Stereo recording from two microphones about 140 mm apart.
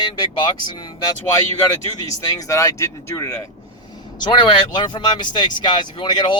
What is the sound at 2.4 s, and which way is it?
Speech, 20° left (ahead or behind).